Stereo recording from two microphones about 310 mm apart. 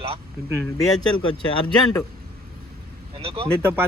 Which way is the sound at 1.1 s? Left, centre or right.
Centre.